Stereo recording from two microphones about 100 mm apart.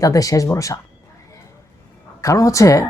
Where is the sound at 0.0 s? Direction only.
35° left (ahead or behind).